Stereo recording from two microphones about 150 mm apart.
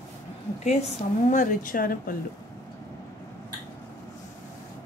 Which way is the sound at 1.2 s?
60° left (ahead or behind).